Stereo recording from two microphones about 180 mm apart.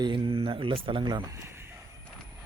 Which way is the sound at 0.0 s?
30° right (ahead or behind).